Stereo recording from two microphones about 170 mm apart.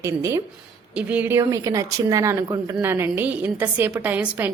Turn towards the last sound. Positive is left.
turn(degrees=-10)  # may be behind; listen again after turning